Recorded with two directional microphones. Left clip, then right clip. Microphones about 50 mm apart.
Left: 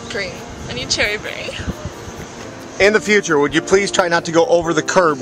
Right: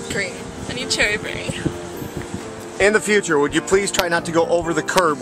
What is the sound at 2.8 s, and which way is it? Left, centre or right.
Speech, left.